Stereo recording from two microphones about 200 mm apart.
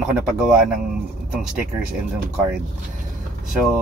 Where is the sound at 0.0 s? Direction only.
5° right (ahead or behind).